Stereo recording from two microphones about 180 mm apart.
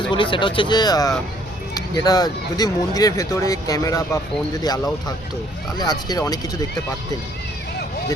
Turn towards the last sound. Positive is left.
turn(degrees=20)  # may be behind; listen again after turning